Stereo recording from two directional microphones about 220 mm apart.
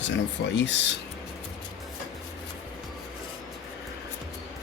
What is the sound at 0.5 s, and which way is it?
Speech, 55° left (ahead or behind).